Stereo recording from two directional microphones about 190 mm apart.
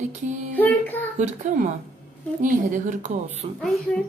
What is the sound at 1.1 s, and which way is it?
A woman's voice, 40° right (ahead or behind).